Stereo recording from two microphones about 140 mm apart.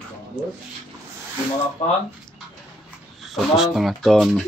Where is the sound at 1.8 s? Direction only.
55° left (ahead or behind).